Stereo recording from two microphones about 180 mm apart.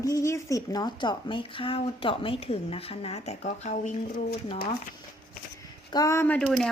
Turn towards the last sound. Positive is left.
turn(degrees=5)  # may be behind; listen again after turning